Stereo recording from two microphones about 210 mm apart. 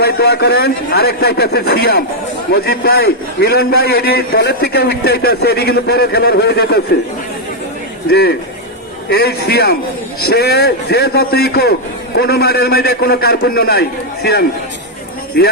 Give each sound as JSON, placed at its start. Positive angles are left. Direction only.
{"t": 0.0, "sound": "a man's voice", "side_deg": 50}
{"t": 9.0, "sound": "a man's voice", "side_deg": 50}